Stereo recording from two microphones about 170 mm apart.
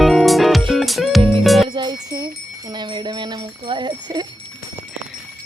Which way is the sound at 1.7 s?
25° right (ahead or behind).